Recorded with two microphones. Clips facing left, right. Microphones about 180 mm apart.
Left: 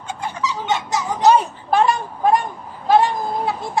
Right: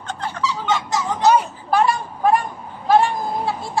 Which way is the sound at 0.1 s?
10° left (ahead or behind).